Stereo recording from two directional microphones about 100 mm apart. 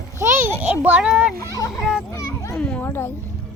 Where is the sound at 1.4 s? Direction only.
35° left (ahead or behind).